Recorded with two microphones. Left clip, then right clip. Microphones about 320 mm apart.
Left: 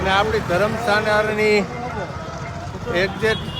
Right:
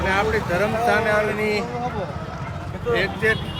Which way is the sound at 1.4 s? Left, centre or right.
Left.